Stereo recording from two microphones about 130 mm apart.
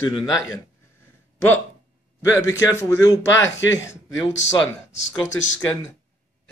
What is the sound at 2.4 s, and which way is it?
Speech, 25° left (ahead or behind).